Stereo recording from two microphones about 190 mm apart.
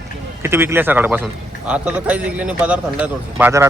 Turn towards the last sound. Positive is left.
turn(degrees=-10)  # may be behind; listen again after turning